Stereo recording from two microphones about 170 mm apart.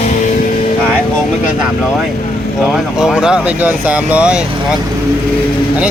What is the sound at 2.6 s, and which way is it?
Speech, centre (ahead or behind).